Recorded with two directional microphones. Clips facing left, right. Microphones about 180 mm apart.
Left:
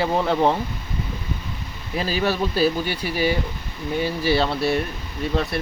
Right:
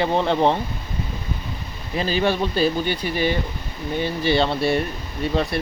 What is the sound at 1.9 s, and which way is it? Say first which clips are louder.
Speech: right 2 dB; 5° left (ahead or behind).